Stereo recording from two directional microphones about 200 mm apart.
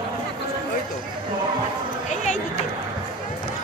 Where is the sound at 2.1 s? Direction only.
35° left (ahead or behind).